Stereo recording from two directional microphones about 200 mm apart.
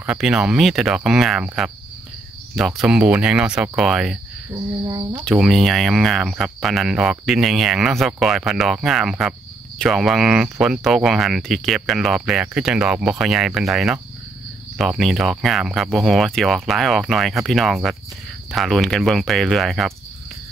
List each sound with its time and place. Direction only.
0.0 s speech: 5° right (ahead or behind)
4.5 s a sound: 20° right (ahead or behind)
5.2 s speech: centre (ahead or behind)